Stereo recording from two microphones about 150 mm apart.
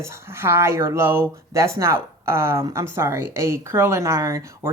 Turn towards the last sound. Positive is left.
turn(degrees=-20)  # may be behind; listen again after turning